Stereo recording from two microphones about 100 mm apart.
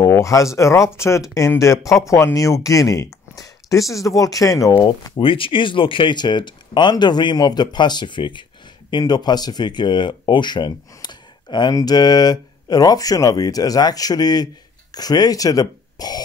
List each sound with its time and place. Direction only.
0.0 s a sound: 30° left (ahead or behind)
0.6 s speech: 30° left (ahead or behind)
5.2 s speech: 60° left (ahead or behind); by 16.2 s 40° left (ahead or behind)